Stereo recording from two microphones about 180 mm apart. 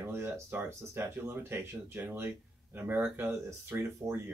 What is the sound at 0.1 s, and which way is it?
Speech, 15° right (ahead or behind).